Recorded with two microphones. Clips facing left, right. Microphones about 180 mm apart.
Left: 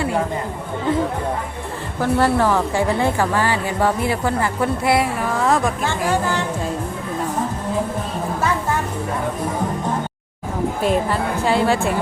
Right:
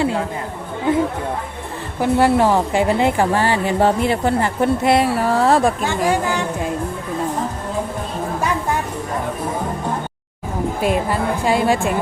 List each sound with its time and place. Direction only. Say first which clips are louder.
2.0 s a woman's voice: right 2 dB; 15° right (ahead or behind); by 5.7 s 35° right (ahead or behind)
5.8 s a woman's voice: right 2 dB; 15° right (ahead or behind)
10.8 s a woman's voice: right 1 dB; 15° right (ahead or behind)